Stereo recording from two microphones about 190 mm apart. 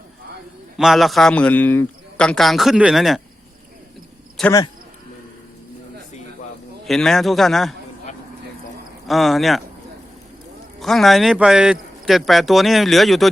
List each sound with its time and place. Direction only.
0.8 s speech: centre (ahead or behind)
4.4 s speech: centre (ahead or behind)
6.8 s speech: centre (ahead or behind)
9.0 s speech: centre (ahead or behind)
10.8 s speech: centre (ahead or behind)